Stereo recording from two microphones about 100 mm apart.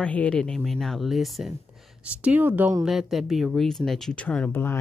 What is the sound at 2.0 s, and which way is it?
Speech, 15° right (ahead or behind).